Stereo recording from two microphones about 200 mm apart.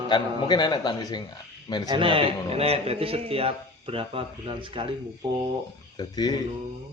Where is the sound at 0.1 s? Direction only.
20° left (ahead or behind).